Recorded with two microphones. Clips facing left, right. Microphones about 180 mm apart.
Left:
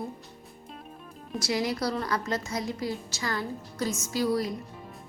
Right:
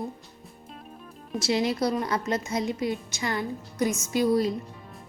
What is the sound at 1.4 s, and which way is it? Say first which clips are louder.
A woman's voice: right 4 dB; 25° right (ahead or behind).